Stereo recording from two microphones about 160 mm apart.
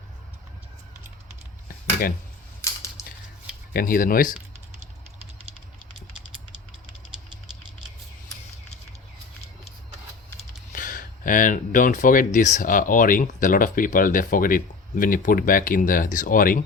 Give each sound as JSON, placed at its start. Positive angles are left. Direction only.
{"t": 1.6, "sound": "a sound", "side_deg": 65}
{"t": 3.7, "sound": "speech", "side_deg": 60}
{"t": 10.7, "sound": "speech", "side_deg": 55}